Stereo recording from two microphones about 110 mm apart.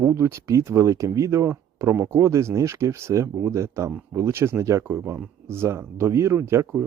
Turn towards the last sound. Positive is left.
turn(degrees=-25)  # may be behind; listen again after turning